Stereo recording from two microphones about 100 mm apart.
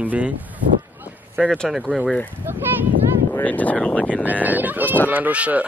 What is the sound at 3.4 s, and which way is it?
Speech, 15° left (ahead or behind).